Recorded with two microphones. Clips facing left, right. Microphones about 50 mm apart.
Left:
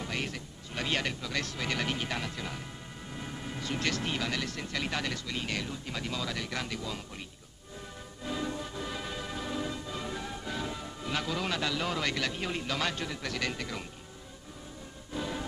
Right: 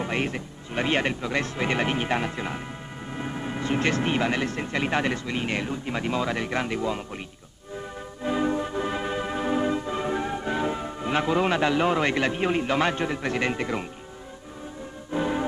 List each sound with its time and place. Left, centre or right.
0.0 s speech: right
8.2 s music: right
15.0 s music: right